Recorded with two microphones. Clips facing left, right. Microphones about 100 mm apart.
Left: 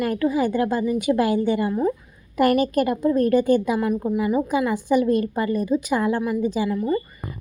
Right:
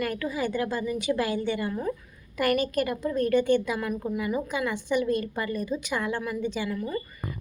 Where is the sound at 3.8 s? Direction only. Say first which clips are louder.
Left 7 dB; 25° left (ahead or behind).